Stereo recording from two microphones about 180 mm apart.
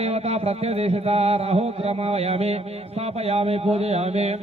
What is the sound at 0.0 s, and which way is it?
A man's voice, 35° right (ahead or behind).